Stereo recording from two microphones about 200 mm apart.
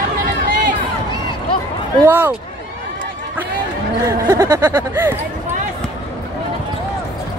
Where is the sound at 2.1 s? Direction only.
10° right (ahead or behind).